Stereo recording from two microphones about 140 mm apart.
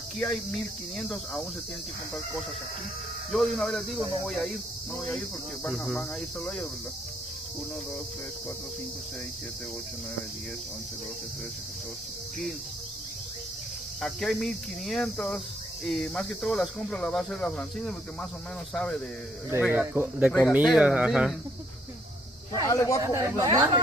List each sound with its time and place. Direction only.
0.9 s speech: 5° left (ahead or behind)
3.3 s speech: 5° left (ahead or behind)
14.0 s speech: 5° left (ahead or behind)
19.6 s speech: 15° right (ahead or behind)
22.7 s speech: 25° left (ahead or behind)
23.0 s speech: 25° right (ahead or behind)